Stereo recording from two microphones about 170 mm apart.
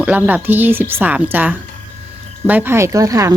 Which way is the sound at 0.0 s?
10° right (ahead or behind).